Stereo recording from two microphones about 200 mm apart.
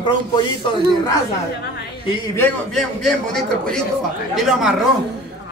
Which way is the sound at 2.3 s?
Centre (ahead or behind).